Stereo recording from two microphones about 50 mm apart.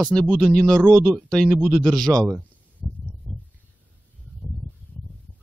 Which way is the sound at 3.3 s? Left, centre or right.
Centre.